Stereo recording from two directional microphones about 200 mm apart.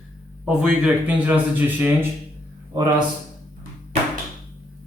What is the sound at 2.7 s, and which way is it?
Speech, 20° right (ahead or behind).